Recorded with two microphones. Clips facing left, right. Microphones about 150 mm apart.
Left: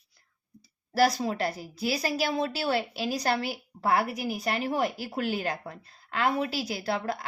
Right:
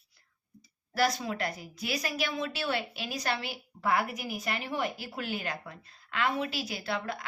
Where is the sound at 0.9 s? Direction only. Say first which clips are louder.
Left 5 dB; 35° left (ahead or behind).